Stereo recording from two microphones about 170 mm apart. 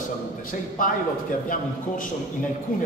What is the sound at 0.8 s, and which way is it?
Speech, 55° left (ahead or behind).